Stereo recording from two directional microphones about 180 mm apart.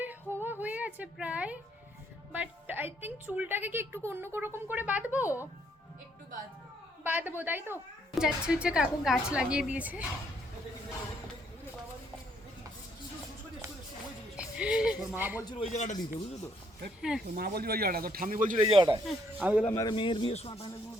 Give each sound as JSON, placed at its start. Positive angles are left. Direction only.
{"t": 0.0, "sound": "a sound", "side_deg": -10}
{"t": 2.3, "sound": "a woman's voice", "side_deg": -10}
{"t": 7.0, "sound": "a woman's voice", "side_deg": -10}
{"t": 14.3, "sound": "a woman's voice", "side_deg": -5}
{"t": 15.4, "sound": "a man's voice", "side_deg": 25}
{"t": 15.7, "sound": "speech", "side_deg": 45}
{"t": 17.0, "sound": "a woman's voice", "side_deg": -5}
{"t": 17.3, "sound": "speech", "side_deg": -60}
{"t": 18.6, "sound": "speech", "side_deg": -30}
{"t": 19.0, "sound": "a woman's voice", "side_deg": -5}
{"t": 19.6, "sound": "a man's voice", "side_deg": 20}